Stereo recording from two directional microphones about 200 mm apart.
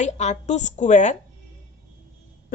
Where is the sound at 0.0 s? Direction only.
35° left (ahead or behind).